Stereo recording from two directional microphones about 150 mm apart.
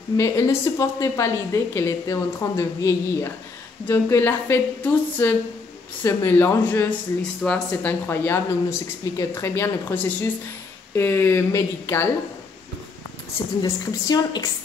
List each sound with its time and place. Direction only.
0.2 s a woman's voice: 20° left (ahead or behind)
13.6 s a woman's voice: 25° left (ahead or behind)